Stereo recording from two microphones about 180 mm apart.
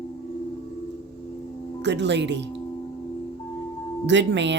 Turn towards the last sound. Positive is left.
turn(degrees=-75)  # may be behind; listen again after turning